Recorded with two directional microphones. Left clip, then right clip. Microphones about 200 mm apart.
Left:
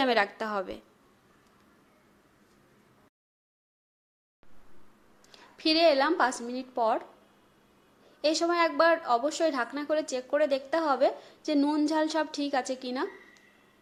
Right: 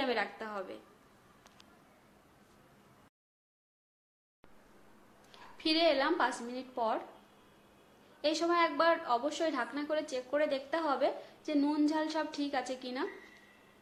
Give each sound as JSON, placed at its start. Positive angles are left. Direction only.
{"t": 0.0, "sound": "a woman's voice", "side_deg": 50}
{"t": 5.3, "sound": "a woman's voice", "side_deg": 35}
{"t": 8.2, "sound": "a woman's voice", "side_deg": 30}